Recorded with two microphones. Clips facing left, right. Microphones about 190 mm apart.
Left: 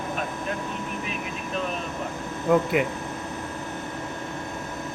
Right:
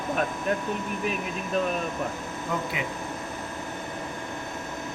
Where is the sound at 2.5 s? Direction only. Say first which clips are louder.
Left 11 dB; 60° left (ahead or behind).